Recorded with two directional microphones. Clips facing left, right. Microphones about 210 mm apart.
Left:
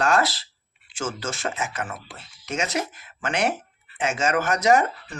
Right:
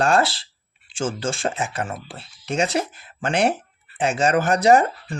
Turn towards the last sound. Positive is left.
turn(degrees=-30)  # may be behind; listen again after turning